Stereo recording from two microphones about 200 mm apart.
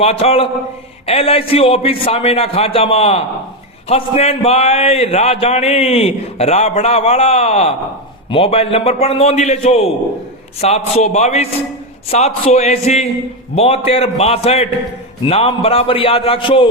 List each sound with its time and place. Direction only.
0.0 s a man's voice: 30° left (ahead or behind)